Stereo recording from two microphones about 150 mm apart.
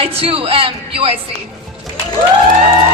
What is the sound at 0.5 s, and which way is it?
Speech, 40° right (ahead or behind).